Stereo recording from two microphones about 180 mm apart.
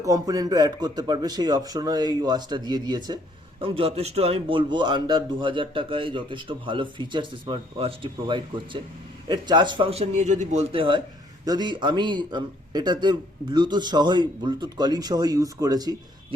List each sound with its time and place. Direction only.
0.0 s a man's voice: 20° right (ahead or behind)